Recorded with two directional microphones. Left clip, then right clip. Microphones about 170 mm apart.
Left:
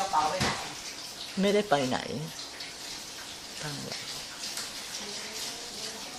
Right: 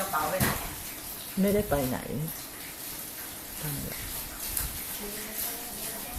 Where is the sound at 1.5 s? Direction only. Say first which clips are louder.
Left 2 dB; 20° left (ahead or behind).